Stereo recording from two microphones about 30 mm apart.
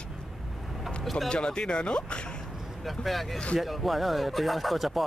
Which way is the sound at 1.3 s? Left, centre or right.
Left.